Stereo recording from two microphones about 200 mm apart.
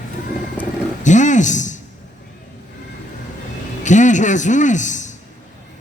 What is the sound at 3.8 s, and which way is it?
A man's voice, 40° left (ahead or behind).